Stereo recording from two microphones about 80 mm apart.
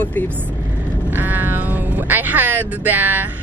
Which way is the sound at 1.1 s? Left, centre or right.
Right.